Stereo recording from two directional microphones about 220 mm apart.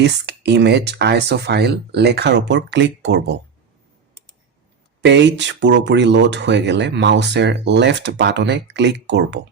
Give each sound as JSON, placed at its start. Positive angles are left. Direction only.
{"t": 0.0, "sound": "speech", "side_deg": -50}
{"t": 5.0, "sound": "speech", "side_deg": -55}